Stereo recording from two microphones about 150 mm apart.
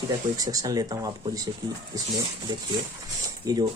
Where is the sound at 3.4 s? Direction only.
25° right (ahead or behind).